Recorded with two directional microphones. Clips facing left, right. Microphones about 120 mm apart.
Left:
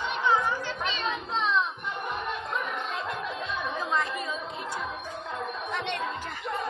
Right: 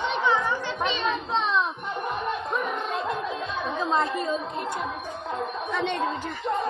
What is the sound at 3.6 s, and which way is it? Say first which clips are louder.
Chatter: right 5 dB; 30° right (ahead or behind).